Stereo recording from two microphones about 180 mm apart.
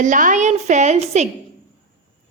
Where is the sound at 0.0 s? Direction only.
45° right (ahead or behind).